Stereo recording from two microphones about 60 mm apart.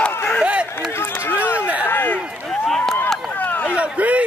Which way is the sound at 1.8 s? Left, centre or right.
Left.